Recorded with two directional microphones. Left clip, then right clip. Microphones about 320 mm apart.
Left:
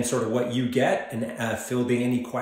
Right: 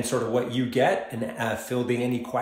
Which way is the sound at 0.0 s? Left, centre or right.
Centre.